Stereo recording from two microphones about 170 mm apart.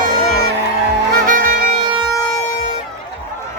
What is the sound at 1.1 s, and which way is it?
Music, 55° right (ahead or behind).